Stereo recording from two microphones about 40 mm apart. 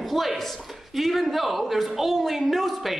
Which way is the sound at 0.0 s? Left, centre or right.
Centre.